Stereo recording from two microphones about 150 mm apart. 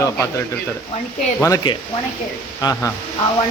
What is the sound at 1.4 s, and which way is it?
Speech, 25° left (ahead or behind).